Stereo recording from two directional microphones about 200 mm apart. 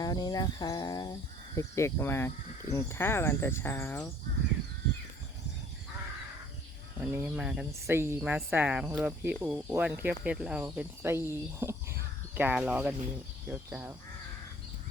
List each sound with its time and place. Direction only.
0.0 s speech: 20° left (ahead or behind)
7.0 s speech: 10° right (ahead or behind)